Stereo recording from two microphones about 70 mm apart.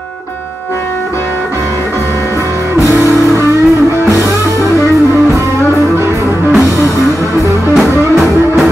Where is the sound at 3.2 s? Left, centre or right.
Right.